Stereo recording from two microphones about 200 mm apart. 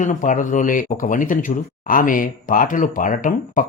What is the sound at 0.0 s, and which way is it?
Speech, 40° left (ahead or behind).